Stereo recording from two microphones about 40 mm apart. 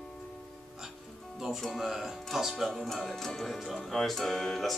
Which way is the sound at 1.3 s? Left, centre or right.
Centre.